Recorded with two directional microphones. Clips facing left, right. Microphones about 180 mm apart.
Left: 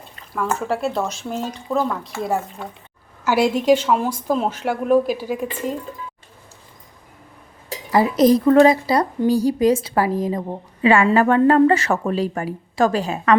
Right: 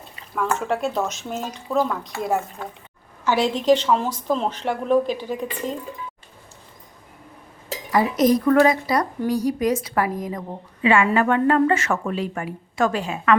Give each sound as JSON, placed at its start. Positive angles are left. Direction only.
{"t": 0.3, "sound": "a woman's voice", "side_deg": 0}
{"t": 7.9, "sound": "a woman's voice", "side_deg": 30}